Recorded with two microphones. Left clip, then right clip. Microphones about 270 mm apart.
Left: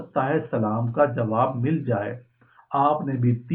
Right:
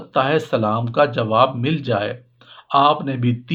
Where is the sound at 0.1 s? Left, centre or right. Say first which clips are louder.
Right 6 dB; right.